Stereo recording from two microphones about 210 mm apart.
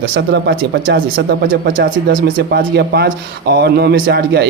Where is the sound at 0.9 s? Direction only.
45° right (ahead or behind).